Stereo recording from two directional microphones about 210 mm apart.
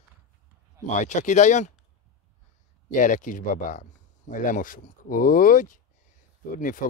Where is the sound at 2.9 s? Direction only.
35° left (ahead or behind).